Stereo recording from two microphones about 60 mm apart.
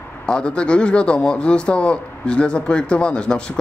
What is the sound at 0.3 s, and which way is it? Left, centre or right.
A man's voice, centre.